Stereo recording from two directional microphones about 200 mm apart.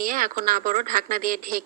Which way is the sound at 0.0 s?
45° right (ahead or behind).